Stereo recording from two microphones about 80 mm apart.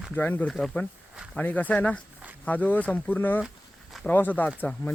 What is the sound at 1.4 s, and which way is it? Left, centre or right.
Speech, centre.